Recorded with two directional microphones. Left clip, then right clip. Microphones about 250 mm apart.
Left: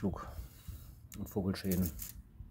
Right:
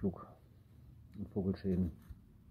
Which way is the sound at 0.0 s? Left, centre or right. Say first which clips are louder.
Left 1 dB; centre.